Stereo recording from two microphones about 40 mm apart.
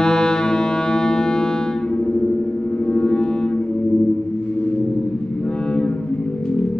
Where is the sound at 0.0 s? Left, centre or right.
Centre.